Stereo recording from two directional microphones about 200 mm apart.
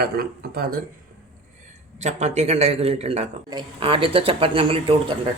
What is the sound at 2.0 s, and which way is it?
A man's voice, 35° right (ahead or behind).